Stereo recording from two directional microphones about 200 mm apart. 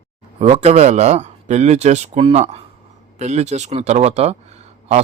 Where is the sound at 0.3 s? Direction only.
30° right (ahead or behind).